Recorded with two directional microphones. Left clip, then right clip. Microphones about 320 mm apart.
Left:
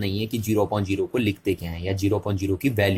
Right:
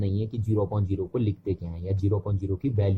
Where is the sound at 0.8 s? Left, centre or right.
Centre.